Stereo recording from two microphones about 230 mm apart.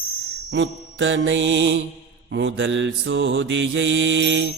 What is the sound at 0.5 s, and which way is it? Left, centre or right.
Mantra, right.